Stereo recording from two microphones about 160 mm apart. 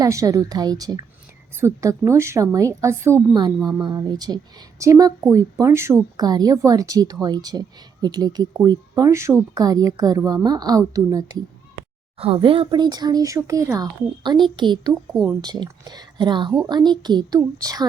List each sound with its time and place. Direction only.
0.0 s a woman's voice: 20° right (ahead or behind)
12.1 s speech: 35° right (ahead or behind)